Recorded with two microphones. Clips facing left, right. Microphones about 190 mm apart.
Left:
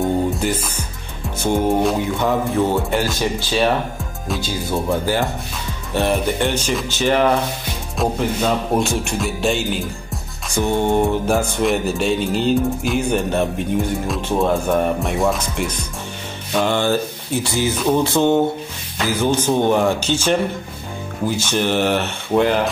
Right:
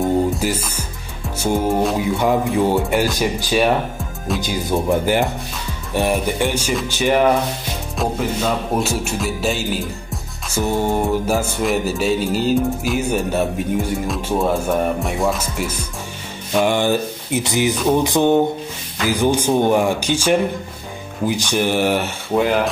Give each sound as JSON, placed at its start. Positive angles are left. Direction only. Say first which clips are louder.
{"t": 0.0, "sound": "music", "louder": "right 1 dB", "side_deg": -5}
{"t": 2.1, "sound": "speech", "louder": "right 1 dB", "side_deg": -10}
{"t": 8.0, "sound": "music", "louder": "left 1 dB", "side_deg": 0}
{"t": 16.6, "sound": "speech", "louder": "even", "side_deg": -15}